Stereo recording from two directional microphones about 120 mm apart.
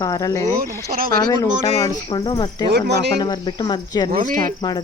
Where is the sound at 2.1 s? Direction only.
50° left (ahead or behind).